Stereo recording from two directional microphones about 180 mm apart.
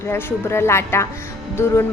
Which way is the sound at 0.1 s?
15° left (ahead or behind).